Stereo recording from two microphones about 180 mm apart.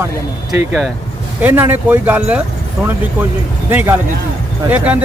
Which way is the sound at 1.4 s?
10° right (ahead or behind).